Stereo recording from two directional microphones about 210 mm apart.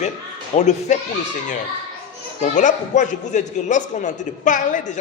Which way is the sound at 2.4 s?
35° left (ahead or behind).